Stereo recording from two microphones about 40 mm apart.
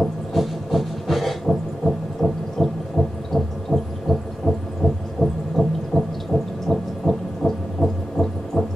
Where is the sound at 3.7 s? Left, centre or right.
Left.